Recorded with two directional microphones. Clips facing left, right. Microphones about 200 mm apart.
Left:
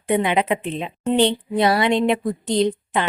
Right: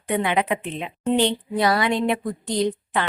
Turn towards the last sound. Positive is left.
turn(degrees=25)  # may be behind; listen again after turning